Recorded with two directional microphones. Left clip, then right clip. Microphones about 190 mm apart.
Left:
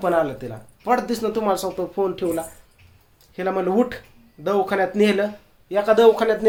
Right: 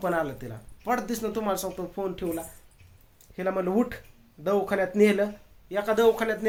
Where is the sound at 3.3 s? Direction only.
20° right (ahead or behind).